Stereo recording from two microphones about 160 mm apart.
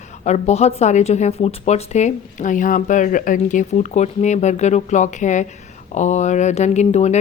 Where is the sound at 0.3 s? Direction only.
45° left (ahead or behind).